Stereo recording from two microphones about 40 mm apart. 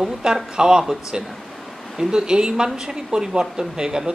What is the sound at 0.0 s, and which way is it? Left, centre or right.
Speech, centre.